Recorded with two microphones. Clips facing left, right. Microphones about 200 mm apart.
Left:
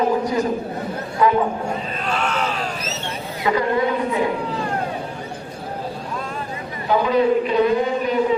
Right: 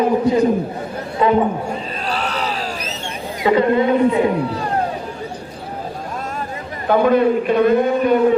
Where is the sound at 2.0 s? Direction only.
35° right (ahead or behind).